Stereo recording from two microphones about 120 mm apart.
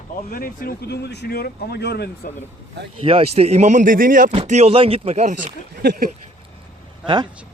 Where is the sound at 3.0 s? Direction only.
50° right (ahead or behind).